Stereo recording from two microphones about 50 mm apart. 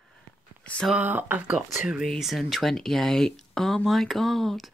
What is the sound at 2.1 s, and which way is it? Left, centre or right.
Speech, centre.